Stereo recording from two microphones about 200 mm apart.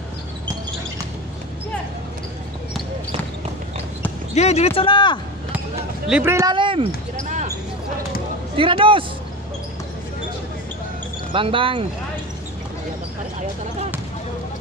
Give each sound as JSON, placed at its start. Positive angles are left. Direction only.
{"t": 4.4, "sound": "speech", "side_deg": 35}
{"t": 6.0, "sound": "speech", "side_deg": -10}
{"t": 6.5, "sound": "speech", "side_deg": -25}
{"t": 8.5, "sound": "speech", "side_deg": -25}
{"t": 11.3, "sound": "speech", "side_deg": -25}